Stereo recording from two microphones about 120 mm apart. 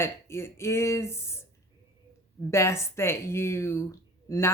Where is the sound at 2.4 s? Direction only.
25° left (ahead or behind).